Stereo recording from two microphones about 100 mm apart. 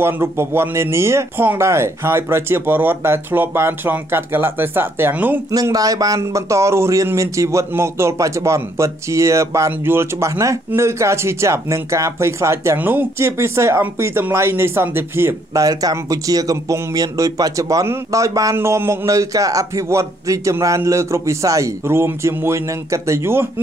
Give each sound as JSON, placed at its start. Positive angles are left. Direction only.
{"t": 0.0, "sound": "speech", "side_deg": -25}
{"t": 5.5, "sound": "speech", "side_deg": -40}
{"t": 15.6, "sound": "speech", "side_deg": -35}